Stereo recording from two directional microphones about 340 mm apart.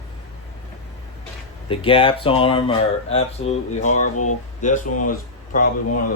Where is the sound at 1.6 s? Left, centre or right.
Centre.